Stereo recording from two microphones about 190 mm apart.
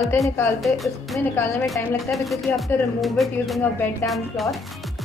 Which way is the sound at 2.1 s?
Centre (ahead or behind).